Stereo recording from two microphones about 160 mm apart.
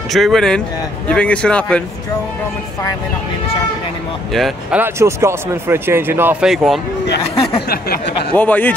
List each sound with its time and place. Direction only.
0.1 s a man's voice: centre (ahead or behind)
4.3 s speech: centre (ahead or behind)
6.5 s speech: centre (ahead or behind)
7.6 s a sound: 80° left
8.4 s a man's voice: 10° left (ahead or behind)